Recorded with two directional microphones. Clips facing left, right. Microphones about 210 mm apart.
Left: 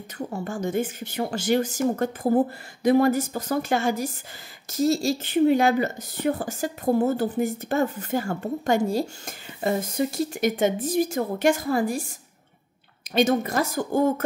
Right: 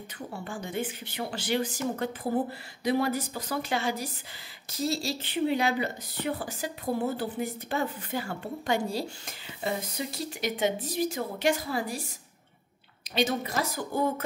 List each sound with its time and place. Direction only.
0.3 s speech: 45° left (ahead or behind)
13.1 s speech: 50° left (ahead or behind)